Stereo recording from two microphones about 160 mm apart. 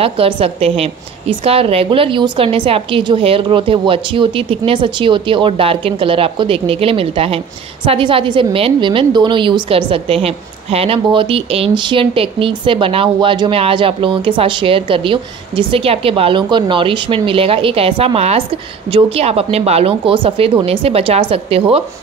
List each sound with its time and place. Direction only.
0.0 s a woman's voice: 35° right (ahead or behind)